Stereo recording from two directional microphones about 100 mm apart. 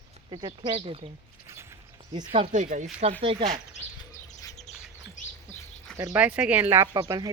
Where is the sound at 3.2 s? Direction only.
65° right (ahead or behind).